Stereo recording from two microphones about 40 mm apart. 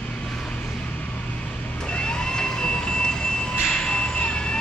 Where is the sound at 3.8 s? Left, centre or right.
Left.